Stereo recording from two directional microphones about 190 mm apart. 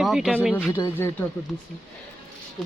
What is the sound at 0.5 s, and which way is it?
Speech, 10° left (ahead or behind).